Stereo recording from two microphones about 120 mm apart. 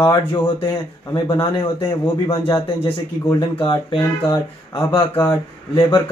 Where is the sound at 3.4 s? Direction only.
45° left (ahead or behind).